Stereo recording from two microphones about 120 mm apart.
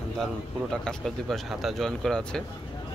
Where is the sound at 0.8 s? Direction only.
Centre (ahead or behind).